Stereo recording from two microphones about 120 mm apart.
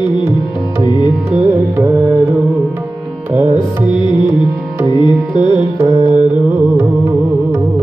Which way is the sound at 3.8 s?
40° left (ahead or behind).